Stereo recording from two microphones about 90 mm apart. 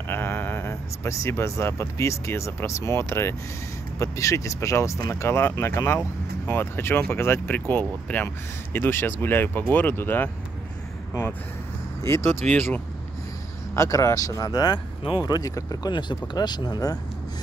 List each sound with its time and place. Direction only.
0.1 s speech: 25° left (ahead or behind)
12.0 s speech: 30° left (ahead or behind)
13.7 s speech: 35° left (ahead or behind)